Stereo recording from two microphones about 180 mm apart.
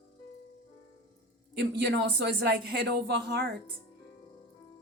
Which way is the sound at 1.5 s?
70° right (ahead or behind).